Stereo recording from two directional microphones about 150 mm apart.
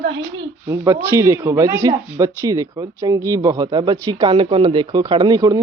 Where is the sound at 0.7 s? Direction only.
20° right (ahead or behind).